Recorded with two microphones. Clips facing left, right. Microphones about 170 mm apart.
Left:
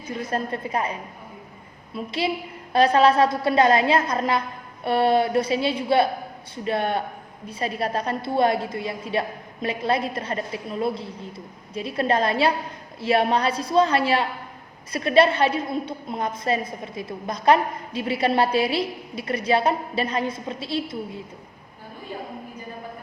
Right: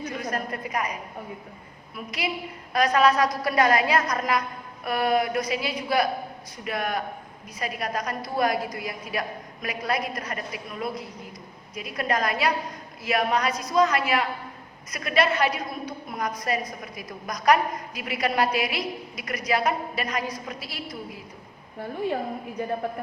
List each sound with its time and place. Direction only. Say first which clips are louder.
0.0 s a woman's voice: left 2 dB; 30° left (ahead or behind)